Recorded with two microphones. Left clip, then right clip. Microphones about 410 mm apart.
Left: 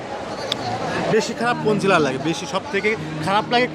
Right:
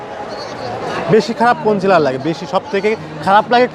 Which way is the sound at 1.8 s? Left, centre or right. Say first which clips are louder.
Right 5 dB; centre.